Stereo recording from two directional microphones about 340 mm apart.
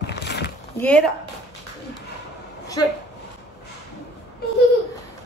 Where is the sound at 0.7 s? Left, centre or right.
Centre.